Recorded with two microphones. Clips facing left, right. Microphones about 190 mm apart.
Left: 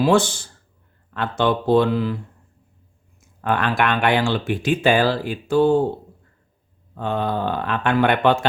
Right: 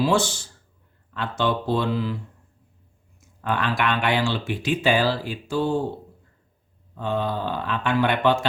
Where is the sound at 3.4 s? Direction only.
55° left (ahead or behind).